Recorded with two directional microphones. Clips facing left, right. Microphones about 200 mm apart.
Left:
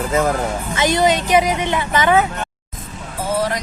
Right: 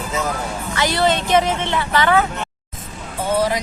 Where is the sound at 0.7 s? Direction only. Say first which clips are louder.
Left 2 dB; 20° left (ahead or behind).